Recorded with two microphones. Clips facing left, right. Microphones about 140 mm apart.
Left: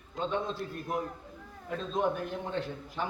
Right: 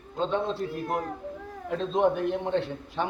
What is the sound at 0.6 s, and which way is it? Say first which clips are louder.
Speech: right 4 dB; 75° right (ahead or behind).